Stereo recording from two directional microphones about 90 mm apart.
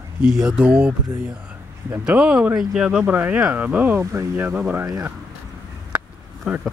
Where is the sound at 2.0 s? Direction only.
10° right (ahead or behind).